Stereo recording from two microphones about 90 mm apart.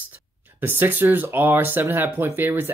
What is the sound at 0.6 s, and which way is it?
Speech, 20° right (ahead or behind).